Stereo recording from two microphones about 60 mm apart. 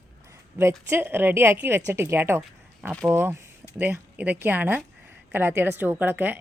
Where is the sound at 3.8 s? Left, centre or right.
Right.